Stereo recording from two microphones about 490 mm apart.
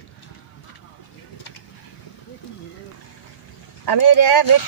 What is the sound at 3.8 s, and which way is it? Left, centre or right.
Speech, left.